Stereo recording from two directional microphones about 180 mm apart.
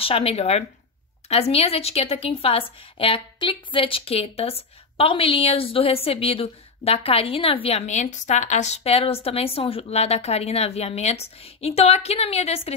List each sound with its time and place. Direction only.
0.0 s a woman's voice: 35° left (ahead or behind)